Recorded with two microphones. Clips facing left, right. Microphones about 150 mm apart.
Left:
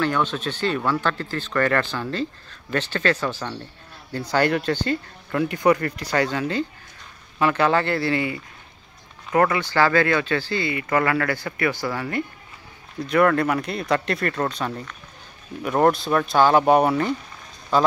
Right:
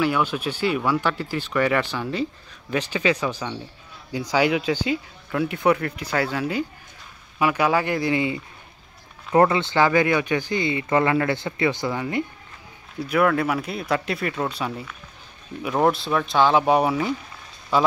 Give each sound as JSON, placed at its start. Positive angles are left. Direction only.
{"t": 0.0, "sound": "speech", "side_deg": -10}
{"t": 13.0, "sound": "speech", "side_deg": -5}